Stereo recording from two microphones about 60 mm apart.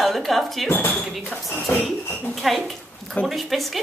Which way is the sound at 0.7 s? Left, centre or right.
Left.